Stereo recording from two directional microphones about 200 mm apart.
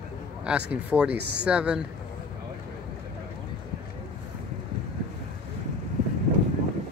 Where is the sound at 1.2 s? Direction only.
60° right (ahead or behind).